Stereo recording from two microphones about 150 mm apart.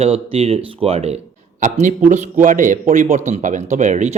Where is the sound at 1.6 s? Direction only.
55° right (ahead or behind).